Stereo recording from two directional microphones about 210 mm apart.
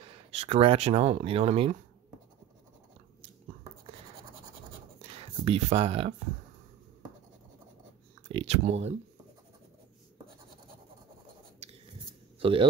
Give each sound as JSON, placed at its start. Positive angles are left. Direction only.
{"t": 0.4, "sound": "speech", "side_deg": -30}
{"t": 4.9, "sound": "a sound", "side_deg": -30}
{"t": 8.3, "sound": "speech", "side_deg": -30}
{"t": 12.4, "sound": "speech", "side_deg": -25}